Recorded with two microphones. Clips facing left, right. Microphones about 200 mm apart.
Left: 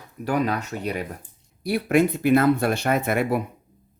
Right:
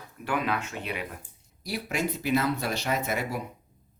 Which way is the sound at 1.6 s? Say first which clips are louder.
Left 11 dB; 55° left (ahead or behind).